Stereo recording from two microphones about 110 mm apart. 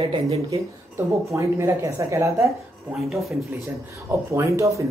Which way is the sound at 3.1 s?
Centre (ahead or behind).